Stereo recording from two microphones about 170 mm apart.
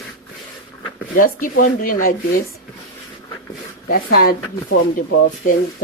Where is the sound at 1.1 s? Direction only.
55° left (ahead or behind).